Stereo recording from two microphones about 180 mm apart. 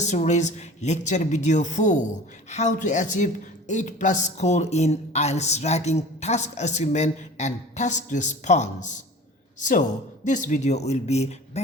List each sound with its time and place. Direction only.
0.0 s speech: 40° left (ahead or behind)